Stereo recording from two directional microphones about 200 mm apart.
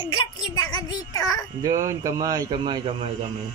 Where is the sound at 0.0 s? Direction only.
25° left (ahead or behind).